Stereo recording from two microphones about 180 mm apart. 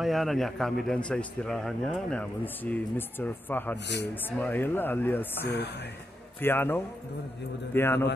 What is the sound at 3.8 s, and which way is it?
Speech, 70° left (ahead or behind).